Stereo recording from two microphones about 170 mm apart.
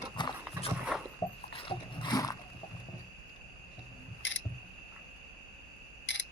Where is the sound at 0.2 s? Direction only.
25° left (ahead or behind).